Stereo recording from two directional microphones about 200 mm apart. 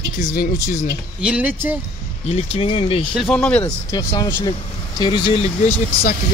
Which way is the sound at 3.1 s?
5° left (ahead or behind).